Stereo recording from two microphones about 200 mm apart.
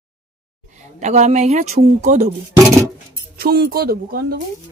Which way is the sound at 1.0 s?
35° right (ahead or behind).